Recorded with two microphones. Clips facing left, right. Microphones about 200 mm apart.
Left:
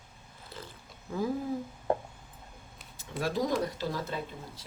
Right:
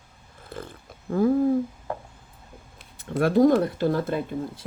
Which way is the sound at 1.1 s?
55° right (ahead or behind).